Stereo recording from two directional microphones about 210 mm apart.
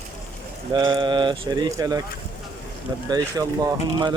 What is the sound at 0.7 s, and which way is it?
Speech, 25° right (ahead or behind).